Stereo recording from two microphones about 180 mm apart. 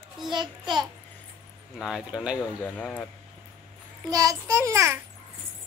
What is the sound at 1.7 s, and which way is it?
Speech, centre (ahead or behind).